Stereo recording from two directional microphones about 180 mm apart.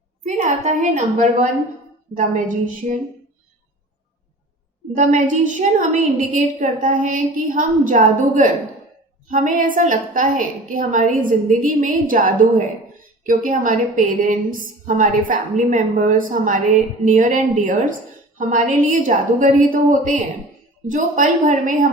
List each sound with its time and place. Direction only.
0.3 s a woman's voice: 40° right (ahead or behind)
4.9 s a woman's voice: 45° right (ahead or behind)
18.9 s a woman's voice: 45° right (ahead or behind)